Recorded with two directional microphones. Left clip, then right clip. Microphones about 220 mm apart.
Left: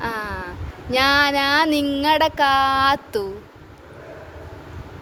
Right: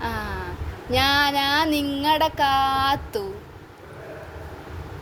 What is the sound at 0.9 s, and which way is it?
Speech, 30° left (ahead or behind).